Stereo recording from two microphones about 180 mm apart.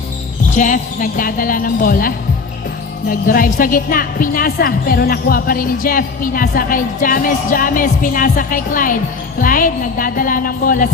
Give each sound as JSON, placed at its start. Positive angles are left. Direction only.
{"t": 0.5, "sound": "a woman's voice", "side_deg": 45}